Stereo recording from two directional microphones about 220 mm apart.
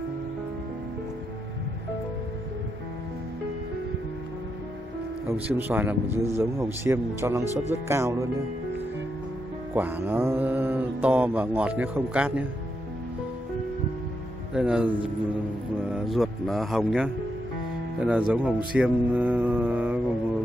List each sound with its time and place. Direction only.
5.3 s mantra: 10° right (ahead or behind)
9.8 s mantra: 10° right (ahead or behind)
14.5 s speech: 5° right (ahead or behind)
15.9 s speech: centre (ahead or behind)
18.0 s mantra: 5° right (ahead or behind)